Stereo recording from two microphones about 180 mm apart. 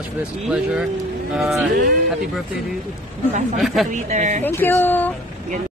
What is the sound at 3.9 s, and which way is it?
Speech, 45° right (ahead or behind).